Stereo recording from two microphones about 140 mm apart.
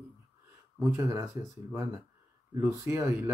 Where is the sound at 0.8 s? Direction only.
20° right (ahead or behind).